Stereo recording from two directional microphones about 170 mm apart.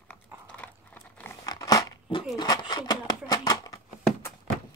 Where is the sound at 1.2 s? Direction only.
20° left (ahead or behind).